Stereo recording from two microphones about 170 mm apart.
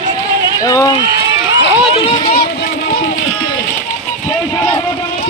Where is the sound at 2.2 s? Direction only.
65° left (ahead or behind).